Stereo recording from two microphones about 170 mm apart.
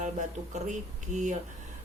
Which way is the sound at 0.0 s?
45° right (ahead or behind).